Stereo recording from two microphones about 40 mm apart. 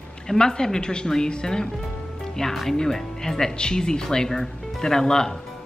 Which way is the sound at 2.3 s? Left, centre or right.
Centre.